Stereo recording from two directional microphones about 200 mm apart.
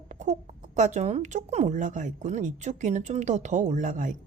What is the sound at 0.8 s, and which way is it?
Speech, 35° right (ahead or behind).